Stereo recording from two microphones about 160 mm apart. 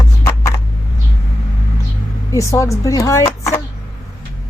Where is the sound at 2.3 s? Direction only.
20° left (ahead or behind).